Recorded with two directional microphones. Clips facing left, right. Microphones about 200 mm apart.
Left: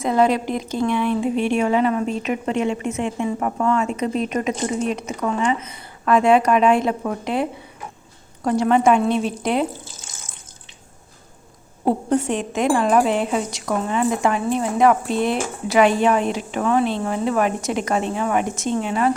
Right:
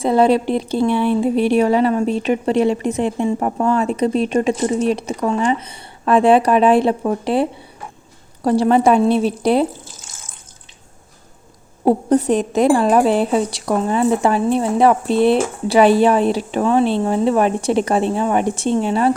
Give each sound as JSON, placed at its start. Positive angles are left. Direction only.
{"t": 0.0, "sound": "speech", "side_deg": -30}
{"t": 8.4, "sound": "speech", "side_deg": -30}
{"t": 11.9, "sound": "speech", "side_deg": -35}